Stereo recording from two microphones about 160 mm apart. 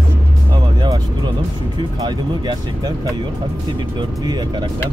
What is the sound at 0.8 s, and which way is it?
Speech, 25° right (ahead or behind).